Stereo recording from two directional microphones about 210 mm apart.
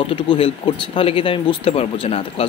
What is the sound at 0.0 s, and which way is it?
Speech, 25° left (ahead or behind).